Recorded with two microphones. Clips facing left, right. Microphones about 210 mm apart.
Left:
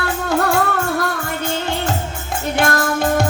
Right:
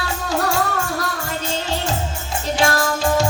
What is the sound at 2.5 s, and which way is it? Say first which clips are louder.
Music: left 1 dB; 55° left (ahead or behind).